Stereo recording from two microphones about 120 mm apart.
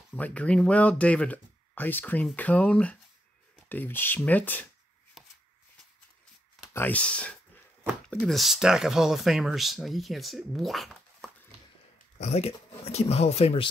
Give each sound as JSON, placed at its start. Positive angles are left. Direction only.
{"t": 0.1, "sound": "speech", "side_deg": 10}
{"t": 5.2, "sound": "shuffling cards", "side_deg": 0}
{"t": 6.7, "sound": "speech", "side_deg": 15}
{"t": 12.2, "sound": "speech", "side_deg": 65}